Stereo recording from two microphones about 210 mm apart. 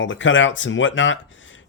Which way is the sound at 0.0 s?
65° left (ahead or behind).